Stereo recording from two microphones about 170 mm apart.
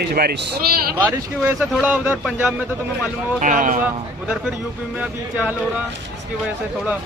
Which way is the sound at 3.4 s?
50° right (ahead or behind).